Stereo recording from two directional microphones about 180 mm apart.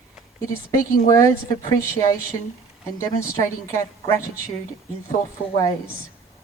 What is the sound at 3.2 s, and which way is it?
A woman's voice, 15° left (ahead or behind).